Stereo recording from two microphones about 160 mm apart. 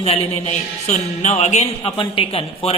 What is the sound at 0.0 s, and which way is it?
A man's voice, 40° left (ahead or behind).